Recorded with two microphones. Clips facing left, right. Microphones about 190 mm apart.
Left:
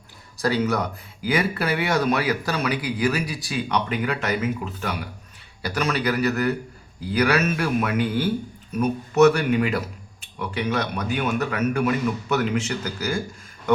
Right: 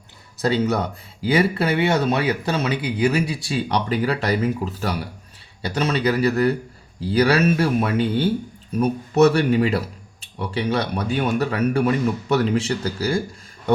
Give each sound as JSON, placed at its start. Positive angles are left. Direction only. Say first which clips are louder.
{"t": 0.4, "sound": "speech", "louder": "right 2 dB", "side_deg": -25}